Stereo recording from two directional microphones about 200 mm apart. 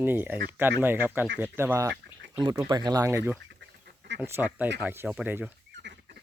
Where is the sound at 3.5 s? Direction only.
65° right (ahead or behind).